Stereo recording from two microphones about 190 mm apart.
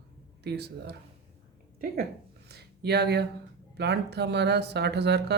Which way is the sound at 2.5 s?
60° right (ahead or behind).